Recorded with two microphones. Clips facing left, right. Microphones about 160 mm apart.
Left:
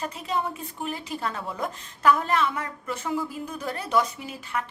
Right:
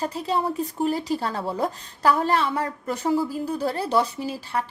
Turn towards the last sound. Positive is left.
turn(degrees=-35)  # may be behind; listen again after turning